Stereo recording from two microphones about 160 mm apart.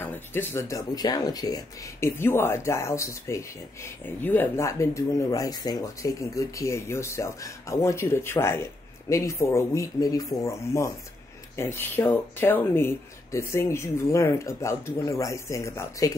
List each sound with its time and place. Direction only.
0.0 s speech: 15° left (ahead or behind)